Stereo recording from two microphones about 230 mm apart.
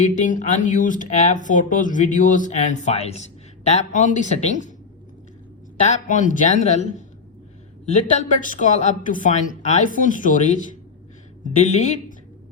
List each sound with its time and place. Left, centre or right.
0.0 s speech: left
5.8 s speech: left